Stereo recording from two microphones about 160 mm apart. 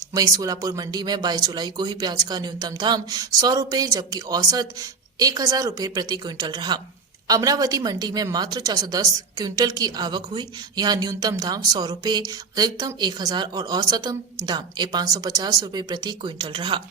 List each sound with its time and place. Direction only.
0.1 s a woman's voice: 20° right (ahead or behind)